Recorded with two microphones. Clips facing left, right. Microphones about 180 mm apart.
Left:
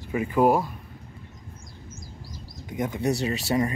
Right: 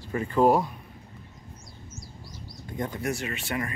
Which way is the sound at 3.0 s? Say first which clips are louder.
Left 6 dB; 35° left (ahead or behind).